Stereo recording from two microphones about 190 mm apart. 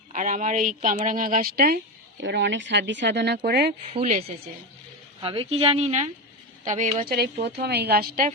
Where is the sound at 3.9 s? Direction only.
35° right (ahead or behind).